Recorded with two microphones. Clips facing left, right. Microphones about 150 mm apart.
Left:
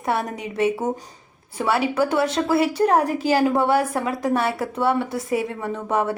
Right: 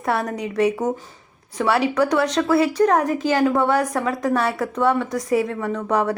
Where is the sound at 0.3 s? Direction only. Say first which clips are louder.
Right 2 dB; 25° left (ahead or behind).